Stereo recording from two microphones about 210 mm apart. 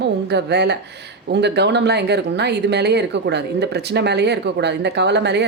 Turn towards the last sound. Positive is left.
turn(degrees=-55)  # may be behind; listen again after turning